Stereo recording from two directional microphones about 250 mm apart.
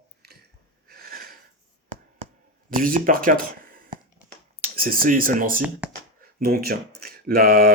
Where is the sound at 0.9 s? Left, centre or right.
Right.